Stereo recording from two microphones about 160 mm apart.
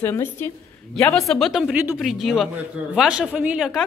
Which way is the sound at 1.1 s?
Centre (ahead or behind).